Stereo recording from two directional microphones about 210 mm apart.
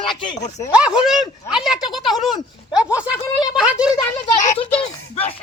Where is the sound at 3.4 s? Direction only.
5° right (ahead or behind).